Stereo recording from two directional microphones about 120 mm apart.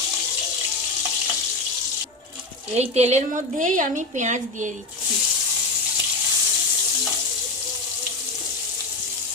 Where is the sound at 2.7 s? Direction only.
65° right (ahead or behind); by 4.7 s 90° right.